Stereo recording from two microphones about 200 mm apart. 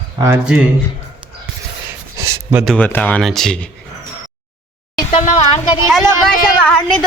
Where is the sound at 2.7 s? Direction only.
10° left (ahead or behind).